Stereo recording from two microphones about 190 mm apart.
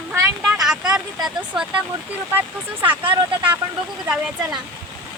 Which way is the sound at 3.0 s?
25° right (ahead or behind).